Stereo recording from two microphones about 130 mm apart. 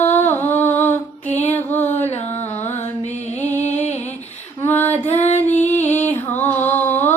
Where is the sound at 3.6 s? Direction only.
60° left (ahead or behind).